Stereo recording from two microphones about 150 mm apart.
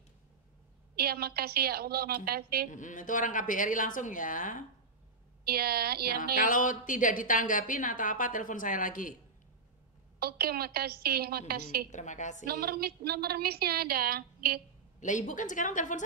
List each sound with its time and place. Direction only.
0.9 s a woman's voice: 90° right
2.7 s a woman's voice: 60° left (ahead or behind)
5.4 s a woman's voice: 90° right
6.3 s a woman's voice: 60° left (ahead or behind)
10.1 s a woman's voice: 90° right
11.9 s a woman's voice: 55° left (ahead or behind)
12.4 s a woman's voice: 90° right
15.0 s a woman's voice: 55° left (ahead or behind)